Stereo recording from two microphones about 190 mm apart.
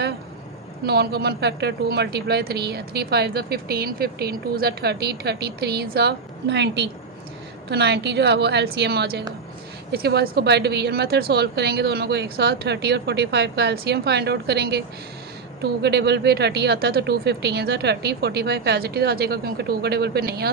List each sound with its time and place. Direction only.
0.9 s speech: 60° right (ahead or behind)